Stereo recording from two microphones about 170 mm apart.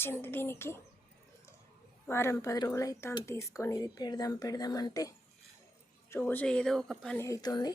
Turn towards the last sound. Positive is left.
turn(degrees=25)  # may be behind; listen again after turning